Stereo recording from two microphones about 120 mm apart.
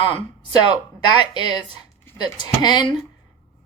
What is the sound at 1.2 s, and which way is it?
Speech, 35° left (ahead or behind).